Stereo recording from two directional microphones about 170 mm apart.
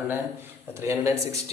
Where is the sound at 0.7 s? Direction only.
15° right (ahead or behind).